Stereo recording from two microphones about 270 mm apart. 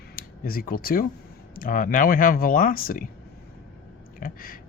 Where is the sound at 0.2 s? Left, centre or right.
Left.